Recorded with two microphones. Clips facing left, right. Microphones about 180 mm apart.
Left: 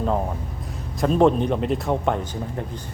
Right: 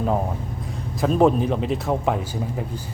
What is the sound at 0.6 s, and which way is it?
A man's voice, centre (ahead or behind).